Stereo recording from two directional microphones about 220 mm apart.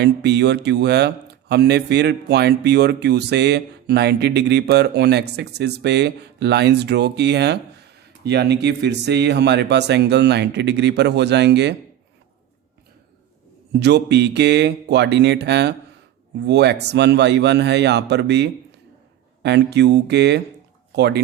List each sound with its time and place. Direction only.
0.0 s speech: 50° right (ahead or behind)
13.7 s speech: 50° right (ahead or behind)